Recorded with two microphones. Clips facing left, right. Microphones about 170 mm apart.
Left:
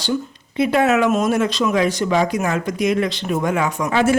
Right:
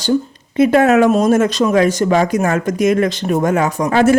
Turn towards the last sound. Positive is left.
turn(degrees=-45)  # may be behind; listen again after turning